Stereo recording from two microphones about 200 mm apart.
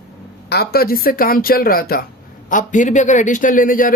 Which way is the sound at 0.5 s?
50° left (ahead or behind).